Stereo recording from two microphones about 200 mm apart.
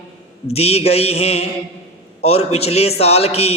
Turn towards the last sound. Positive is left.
turn(degrees=30)  # may be behind; listen again after turning